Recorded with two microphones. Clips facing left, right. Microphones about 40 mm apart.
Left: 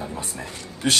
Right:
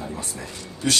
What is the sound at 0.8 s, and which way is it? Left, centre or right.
Speech, left.